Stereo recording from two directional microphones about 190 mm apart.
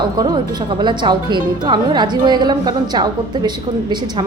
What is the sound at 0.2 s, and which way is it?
A woman's voice, 20° right (ahead or behind).